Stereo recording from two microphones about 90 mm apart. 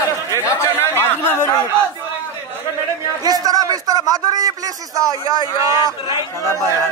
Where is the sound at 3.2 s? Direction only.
45° right (ahead or behind).